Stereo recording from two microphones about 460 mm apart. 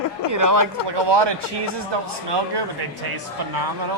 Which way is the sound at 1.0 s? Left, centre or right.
Right.